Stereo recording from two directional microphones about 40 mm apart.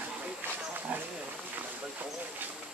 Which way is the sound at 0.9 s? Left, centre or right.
Right.